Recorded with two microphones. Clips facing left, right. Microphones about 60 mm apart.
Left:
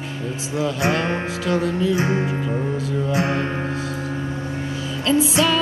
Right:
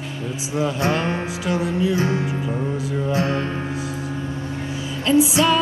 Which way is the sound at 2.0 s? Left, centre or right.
Left.